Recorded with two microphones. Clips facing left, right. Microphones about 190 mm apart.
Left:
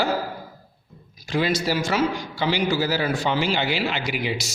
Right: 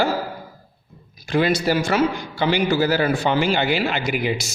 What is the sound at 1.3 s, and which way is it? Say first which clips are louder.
A man's voice: right 4 dB; 55° right (ahead or behind).